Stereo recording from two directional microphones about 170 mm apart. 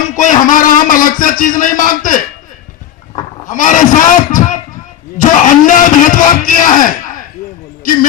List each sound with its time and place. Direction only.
0.0 s a man's voice: 45° left (ahead or behind)
3.4 s a sound: 50° left (ahead or behind)
5.1 s speech: 50° left (ahead or behind)